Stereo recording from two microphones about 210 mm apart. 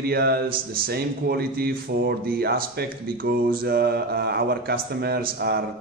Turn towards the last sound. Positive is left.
turn(degrees=-45)  # may be behind; listen again after turning